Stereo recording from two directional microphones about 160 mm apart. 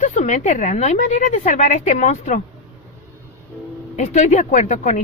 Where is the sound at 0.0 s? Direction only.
50° left (ahead or behind).